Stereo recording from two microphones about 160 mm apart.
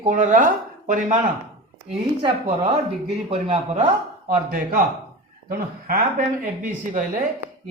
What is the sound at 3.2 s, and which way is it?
Speech, 40° right (ahead or behind).